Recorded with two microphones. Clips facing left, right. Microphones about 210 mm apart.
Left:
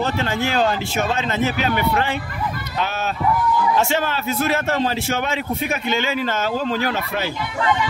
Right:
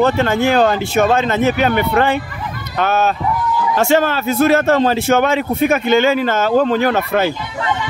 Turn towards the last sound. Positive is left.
turn(degrees=-55)  # may be behind; listen again after turning